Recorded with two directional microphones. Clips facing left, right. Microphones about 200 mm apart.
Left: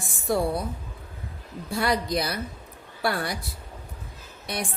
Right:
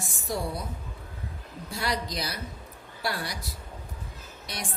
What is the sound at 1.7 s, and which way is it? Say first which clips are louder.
A woman's voice: left 7 dB; 55° left (ahead or behind).